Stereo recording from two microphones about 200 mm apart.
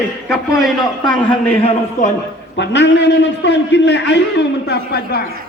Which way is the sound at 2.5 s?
60° left (ahead or behind).